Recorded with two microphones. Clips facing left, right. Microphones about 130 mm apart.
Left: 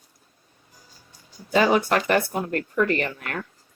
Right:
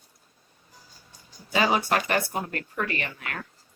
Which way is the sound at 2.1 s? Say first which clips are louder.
Left 5 dB; 50° left (ahead or behind).